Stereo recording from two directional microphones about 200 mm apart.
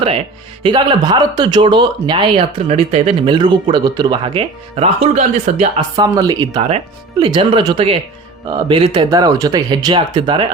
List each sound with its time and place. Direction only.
0.6 s speech: 25° right (ahead or behind)
6.0 s speech: 20° right (ahead or behind)